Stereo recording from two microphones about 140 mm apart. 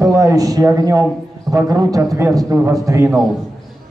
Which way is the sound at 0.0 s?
25° right (ahead or behind).